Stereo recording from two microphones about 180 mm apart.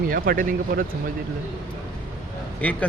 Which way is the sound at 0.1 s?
50° right (ahead or behind).